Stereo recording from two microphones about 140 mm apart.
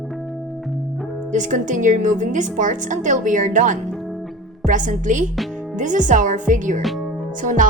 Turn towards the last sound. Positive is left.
turn(degrees=-70)  # may be behind; listen again after turning